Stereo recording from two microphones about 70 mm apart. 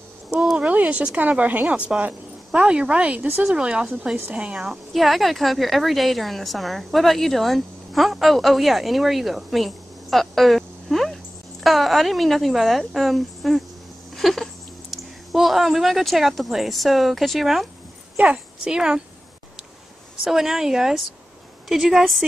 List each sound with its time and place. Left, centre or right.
0.6 s a woman's voice: right
4.9 s a woman's voice: centre
18.1 s a child's voice: centre
20.2 s a woman's voice: centre